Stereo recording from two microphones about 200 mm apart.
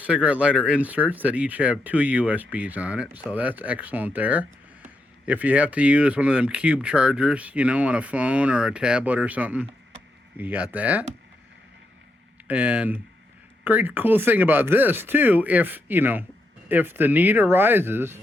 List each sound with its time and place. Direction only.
0.0 s speech: 5° right (ahead or behind)
12.5 s speech: 5° right (ahead or behind)